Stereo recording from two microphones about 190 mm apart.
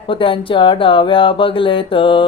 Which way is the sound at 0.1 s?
25° left (ahead or behind).